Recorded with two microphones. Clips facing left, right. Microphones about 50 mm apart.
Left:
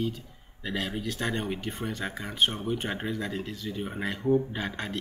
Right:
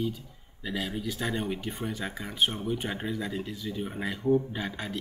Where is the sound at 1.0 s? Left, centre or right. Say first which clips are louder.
Even; centre.